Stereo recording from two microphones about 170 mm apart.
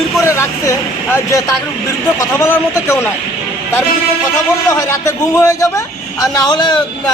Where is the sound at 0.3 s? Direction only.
15° left (ahead or behind).